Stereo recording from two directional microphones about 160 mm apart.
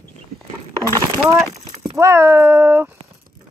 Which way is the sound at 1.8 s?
20° right (ahead or behind).